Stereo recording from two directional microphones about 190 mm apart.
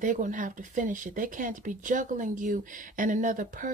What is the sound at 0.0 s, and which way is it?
Speech, 45° right (ahead or behind).